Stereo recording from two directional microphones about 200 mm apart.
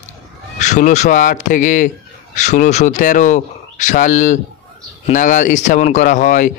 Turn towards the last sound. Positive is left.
turn(degrees=40)  # may be behind; listen again after turning